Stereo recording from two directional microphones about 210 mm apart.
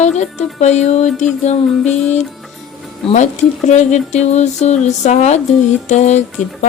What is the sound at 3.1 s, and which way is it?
Speech, 35° left (ahead or behind).